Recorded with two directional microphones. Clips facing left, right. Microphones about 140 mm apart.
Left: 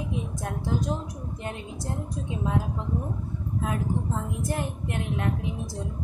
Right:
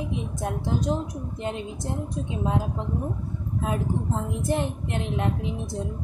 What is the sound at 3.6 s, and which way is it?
A woman's voice, 25° right (ahead or behind).